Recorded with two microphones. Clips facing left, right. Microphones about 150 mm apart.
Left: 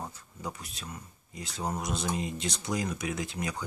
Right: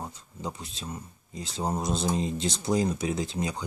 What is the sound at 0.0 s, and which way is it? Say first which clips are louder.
Speech: right 2 dB; 20° right (ahead or behind).